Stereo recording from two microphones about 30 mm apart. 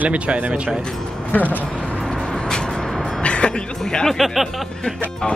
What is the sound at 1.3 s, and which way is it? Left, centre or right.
Speech, left.